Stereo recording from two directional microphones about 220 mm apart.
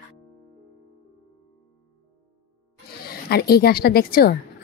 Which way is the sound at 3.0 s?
45° left (ahead or behind).